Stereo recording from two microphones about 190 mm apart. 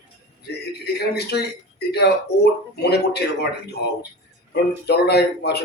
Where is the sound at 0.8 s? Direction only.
60° left (ahead or behind).